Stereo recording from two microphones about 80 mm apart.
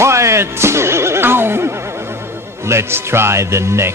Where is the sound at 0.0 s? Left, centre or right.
Right.